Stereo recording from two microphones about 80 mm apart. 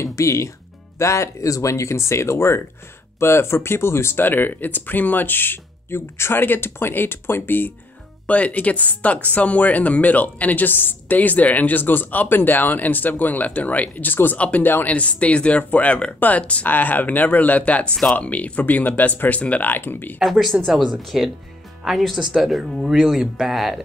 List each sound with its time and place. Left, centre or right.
0.0 s music: left
0.9 s speech: left
20.2 s speech: centre